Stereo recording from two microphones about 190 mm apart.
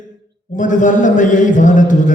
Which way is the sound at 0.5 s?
40° left (ahead or behind).